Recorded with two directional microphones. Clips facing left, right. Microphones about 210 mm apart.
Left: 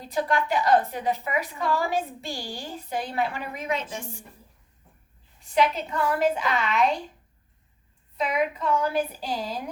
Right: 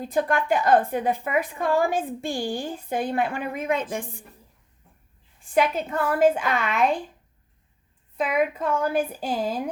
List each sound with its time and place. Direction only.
0.0 s a woman's voice: 50° right (ahead or behind)
5.4 s a woman's voice: 50° right (ahead or behind)
8.1 s a woman's voice: 50° right (ahead or behind)